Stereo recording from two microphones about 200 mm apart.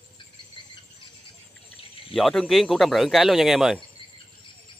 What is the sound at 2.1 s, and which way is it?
Speech, centre (ahead or behind).